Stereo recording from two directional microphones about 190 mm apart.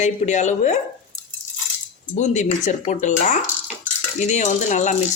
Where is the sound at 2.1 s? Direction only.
40° left (ahead or behind).